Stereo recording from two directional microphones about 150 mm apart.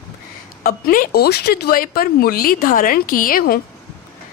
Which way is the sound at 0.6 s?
75° left (ahead or behind).